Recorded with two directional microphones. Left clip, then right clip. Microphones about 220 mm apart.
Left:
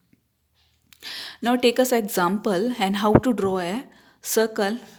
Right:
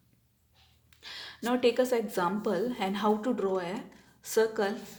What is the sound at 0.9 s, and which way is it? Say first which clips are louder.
Speech: left 8 dB; 45° left (ahead or behind).